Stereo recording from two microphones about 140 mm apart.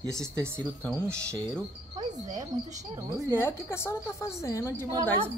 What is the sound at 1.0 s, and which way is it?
Speech, 20° right (ahead or behind).